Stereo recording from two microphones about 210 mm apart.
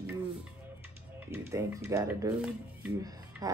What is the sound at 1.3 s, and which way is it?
Speech, 15° right (ahead or behind).